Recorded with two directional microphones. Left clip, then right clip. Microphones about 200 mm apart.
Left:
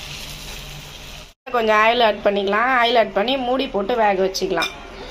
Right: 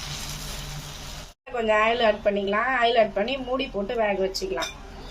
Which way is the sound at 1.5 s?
25° left (ahead or behind).